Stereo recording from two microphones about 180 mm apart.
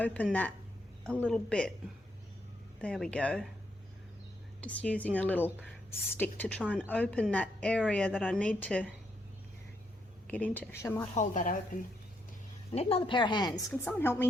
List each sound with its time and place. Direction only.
0.0 s a woman's voice: 5° left (ahead or behind)
2.8 s speech: 5° left (ahead or behind)
4.6 s a woman's voice: 10° left (ahead or behind)
10.2 s a woman's voice: 10° left (ahead or behind)
11.1 s a woman's voice: 45° left (ahead or behind)
12.7 s speech: 35° left (ahead or behind)
13.8 s a woman's voice: 10° left (ahead or behind)